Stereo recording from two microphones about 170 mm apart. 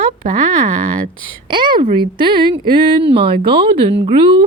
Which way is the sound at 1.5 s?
25° right (ahead or behind).